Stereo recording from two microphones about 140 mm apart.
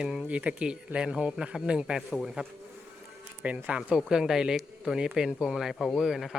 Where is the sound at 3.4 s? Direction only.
10° right (ahead or behind).